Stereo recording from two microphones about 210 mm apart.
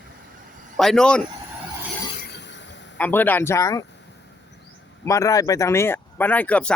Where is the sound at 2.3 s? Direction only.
60° left (ahead or behind).